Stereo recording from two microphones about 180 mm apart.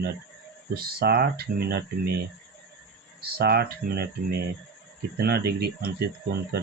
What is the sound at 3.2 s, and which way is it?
Speech, 60° right (ahead or behind).